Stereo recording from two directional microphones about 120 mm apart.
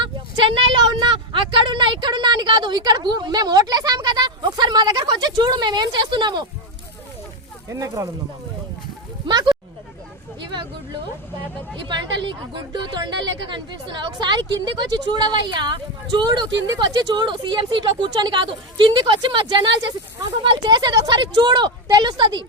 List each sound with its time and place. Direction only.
0.0 s a woman's voice: 45° right (ahead or behind)
7.7 s speech: 25° right (ahead or behind)
9.2 s speech: 35° right (ahead or behind)
11.9 s speech: 40° right (ahead or behind)